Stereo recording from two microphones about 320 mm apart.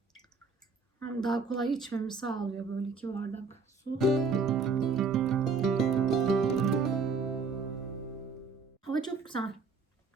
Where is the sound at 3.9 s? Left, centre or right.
Centre.